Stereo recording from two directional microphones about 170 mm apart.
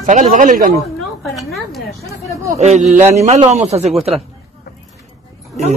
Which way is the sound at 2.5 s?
40° right (ahead or behind).